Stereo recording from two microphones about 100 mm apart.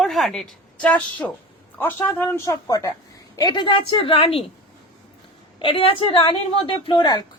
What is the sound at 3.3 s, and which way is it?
A woman's voice, 45° left (ahead or behind).